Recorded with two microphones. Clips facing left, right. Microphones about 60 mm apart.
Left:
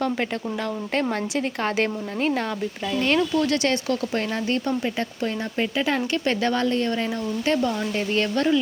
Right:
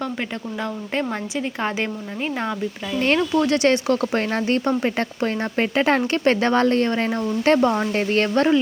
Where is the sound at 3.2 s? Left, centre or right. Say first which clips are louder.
Right 3 dB; right.